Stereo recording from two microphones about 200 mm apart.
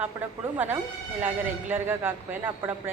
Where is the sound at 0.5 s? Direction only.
10° right (ahead or behind).